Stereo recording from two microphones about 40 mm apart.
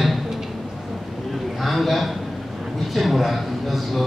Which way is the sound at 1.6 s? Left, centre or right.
Centre.